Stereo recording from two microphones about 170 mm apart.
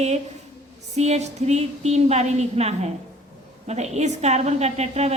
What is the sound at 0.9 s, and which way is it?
A woman's voice, 40° right (ahead or behind).